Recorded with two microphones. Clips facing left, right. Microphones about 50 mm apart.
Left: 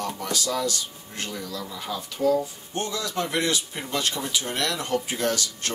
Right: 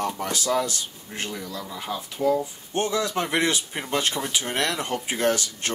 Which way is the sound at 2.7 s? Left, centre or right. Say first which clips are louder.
Right 8 dB; right.